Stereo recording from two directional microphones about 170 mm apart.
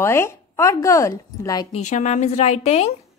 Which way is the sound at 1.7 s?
45° left (ahead or behind).